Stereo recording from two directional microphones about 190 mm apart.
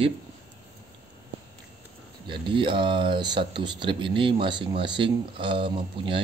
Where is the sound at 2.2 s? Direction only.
25° right (ahead or behind).